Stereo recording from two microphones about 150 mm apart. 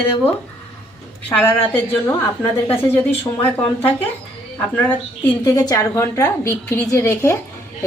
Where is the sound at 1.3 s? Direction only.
10° left (ahead or behind).